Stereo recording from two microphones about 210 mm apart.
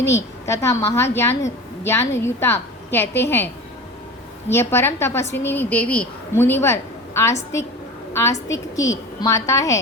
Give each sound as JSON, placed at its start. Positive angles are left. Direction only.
{"t": 0.1, "sound": "a woman's voice", "side_deg": 15}